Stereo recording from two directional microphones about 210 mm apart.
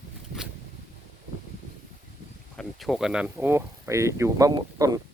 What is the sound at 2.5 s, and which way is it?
Speech, centre (ahead or behind).